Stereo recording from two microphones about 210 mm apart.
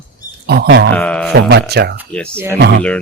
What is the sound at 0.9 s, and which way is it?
Speech, 5° left (ahead or behind).